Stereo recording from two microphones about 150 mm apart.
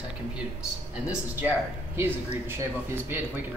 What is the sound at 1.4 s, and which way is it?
Speech, 15° right (ahead or behind).